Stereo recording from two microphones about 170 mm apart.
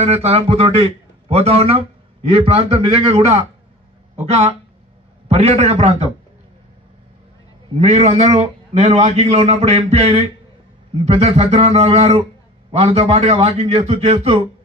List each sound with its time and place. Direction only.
0.0 s a man's voice: 40° right (ahead or behind)
7.7 s a man's voice: 40° right (ahead or behind)